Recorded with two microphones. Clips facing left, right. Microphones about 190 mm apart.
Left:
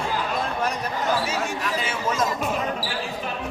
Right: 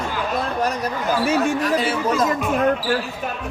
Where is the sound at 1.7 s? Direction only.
35° right (ahead or behind).